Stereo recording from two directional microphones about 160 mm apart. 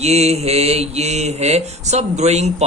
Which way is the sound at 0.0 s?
40° right (ahead or behind).